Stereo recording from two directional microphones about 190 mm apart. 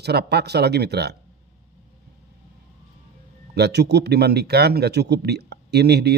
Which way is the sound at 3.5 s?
60° right (ahead or behind).